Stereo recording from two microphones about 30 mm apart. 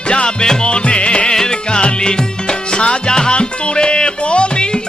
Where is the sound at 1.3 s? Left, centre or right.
Left.